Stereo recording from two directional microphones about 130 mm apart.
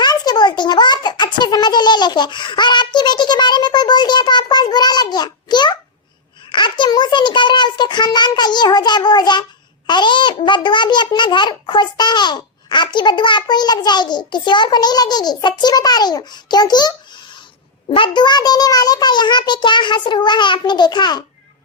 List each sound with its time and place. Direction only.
0.0 s a sound: 30° left (ahead or behind)
6.5 s a child's voice: 35° left (ahead or behind)
17.9 s a child's voice: 40° left (ahead or behind)